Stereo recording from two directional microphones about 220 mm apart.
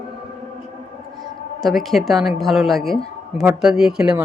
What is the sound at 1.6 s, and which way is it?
Speech, centre (ahead or behind).